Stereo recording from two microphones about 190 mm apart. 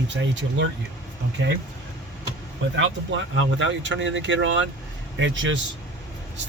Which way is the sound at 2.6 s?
90° right.